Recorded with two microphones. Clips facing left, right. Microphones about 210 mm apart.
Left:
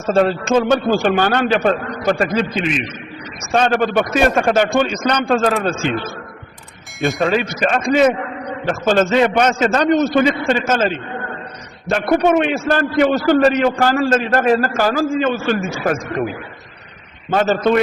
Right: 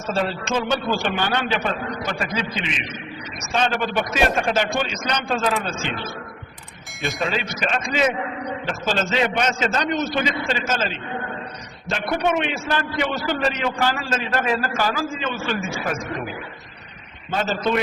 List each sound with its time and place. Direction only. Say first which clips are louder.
0.1 s a man's voice: left 9 dB; 50° left (ahead or behind)
3.5 s a man's voice: left 7 dB; 50° left (ahead or behind)
7.2 s a man's voice: left 7 dB; 55° left (ahead or behind)
17.3 s a man's voice: left 7 dB; 55° left (ahead or behind)